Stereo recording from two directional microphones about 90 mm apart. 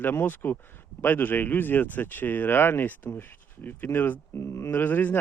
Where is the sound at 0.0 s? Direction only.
25° left (ahead or behind).